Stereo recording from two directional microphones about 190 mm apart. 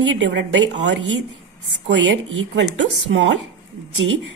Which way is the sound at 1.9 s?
80° right.